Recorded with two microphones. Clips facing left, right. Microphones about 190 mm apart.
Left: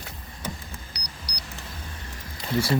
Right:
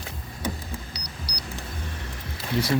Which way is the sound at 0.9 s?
30° right (ahead or behind).